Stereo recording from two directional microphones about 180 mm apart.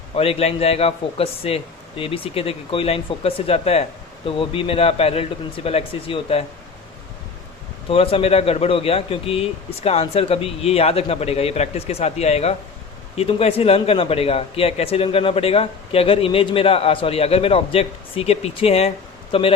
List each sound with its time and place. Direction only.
0.2 s speech: 35° left (ahead or behind)
7.9 s speech: 30° left (ahead or behind)